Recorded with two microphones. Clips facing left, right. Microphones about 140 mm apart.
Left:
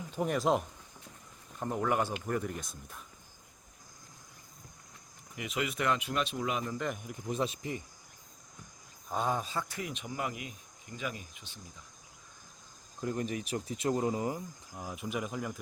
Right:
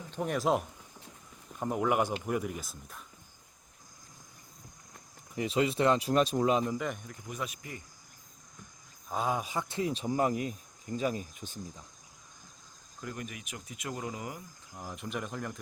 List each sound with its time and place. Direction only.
0.1 s speech: centre (ahead or behind)
5.4 s speech: 30° right (ahead or behind)
6.7 s speech: centre (ahead or behind)
7.3 s speech: 30° left (ahead or behind)
9.0 s speech: centre (ahead or behind); by 11.6 s 40° right (ahead or behind)
13.0 s speech: 30° left (ahead or behind)
14.8 s speech: 10° left (ahead or behind)